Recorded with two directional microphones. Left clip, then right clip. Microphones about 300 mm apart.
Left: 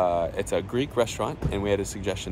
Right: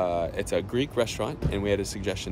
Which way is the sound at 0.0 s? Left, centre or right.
Centre.